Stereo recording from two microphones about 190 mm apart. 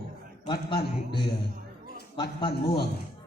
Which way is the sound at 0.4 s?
25° left (ahead or behind).